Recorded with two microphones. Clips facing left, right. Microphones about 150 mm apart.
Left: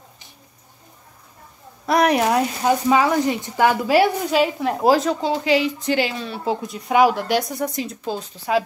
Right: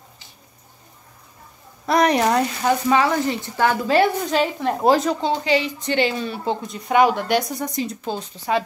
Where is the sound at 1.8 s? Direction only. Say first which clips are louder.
Even; 5° left (ahead or behind).